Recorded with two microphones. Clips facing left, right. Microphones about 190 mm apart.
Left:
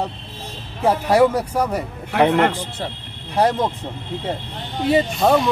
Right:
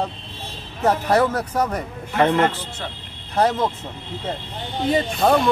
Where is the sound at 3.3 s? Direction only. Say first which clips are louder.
Left 1 dB; 10° left (ahead or behind).